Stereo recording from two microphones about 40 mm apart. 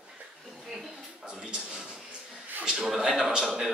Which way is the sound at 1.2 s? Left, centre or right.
Right.